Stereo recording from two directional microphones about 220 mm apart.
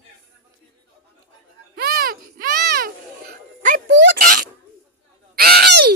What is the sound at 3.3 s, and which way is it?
Music, 35° right (ahead or behind).